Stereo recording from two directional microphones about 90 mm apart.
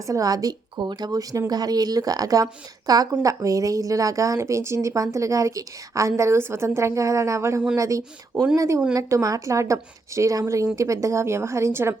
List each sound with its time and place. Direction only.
0.0 s speech: 40° right (ahead or behind)
0.8 s speech: 55° right (ahead or behind); by 11.9 s 30° right (ahead or behind)